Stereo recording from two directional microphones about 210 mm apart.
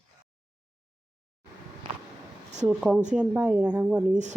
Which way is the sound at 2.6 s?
5° right (ahead or behind).